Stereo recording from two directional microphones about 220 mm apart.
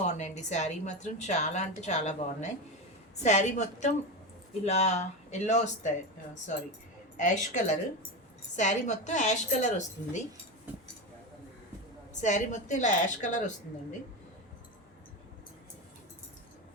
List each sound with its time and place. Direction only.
0.0 s a woman's voice: 30° left (ahead or behind)
7.2 s a woman's voice: 35° left (ahead or behind)
12.2 s a woman's voice: 35° left (ahead or behind)